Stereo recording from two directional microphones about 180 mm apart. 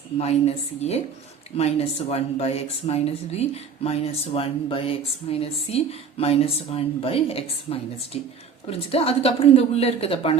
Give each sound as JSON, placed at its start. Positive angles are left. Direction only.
{"t": 0.2, "sound": "speech", "side_deg": 35}